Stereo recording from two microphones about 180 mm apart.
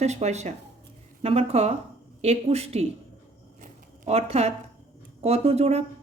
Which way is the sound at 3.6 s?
35° right (ahead or behind).